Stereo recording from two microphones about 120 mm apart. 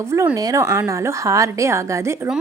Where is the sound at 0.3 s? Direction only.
30° right (ahead or behind).